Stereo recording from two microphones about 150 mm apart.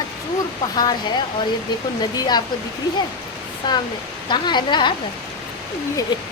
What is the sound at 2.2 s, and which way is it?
Speech, 30° left (ahead or behind).